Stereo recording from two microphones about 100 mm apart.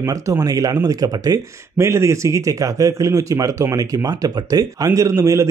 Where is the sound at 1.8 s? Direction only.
30° right (ahead or behind).